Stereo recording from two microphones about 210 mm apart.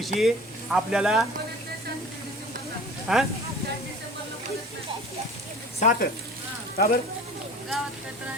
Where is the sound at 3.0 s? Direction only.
Centre (ahead or behind).